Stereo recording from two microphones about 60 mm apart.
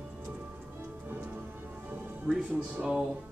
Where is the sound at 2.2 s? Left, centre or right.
Centre.